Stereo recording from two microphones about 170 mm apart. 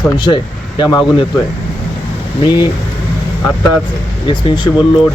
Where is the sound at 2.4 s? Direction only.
25° left (ahead or behind).